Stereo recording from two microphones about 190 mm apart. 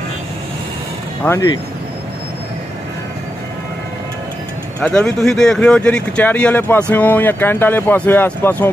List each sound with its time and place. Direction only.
1.2 s speech: 15° left (ahead or behind)
4.7 s speech: 5° left (ahead or behind)